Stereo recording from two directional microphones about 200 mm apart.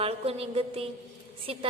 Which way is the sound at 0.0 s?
30° right (ahead or behind).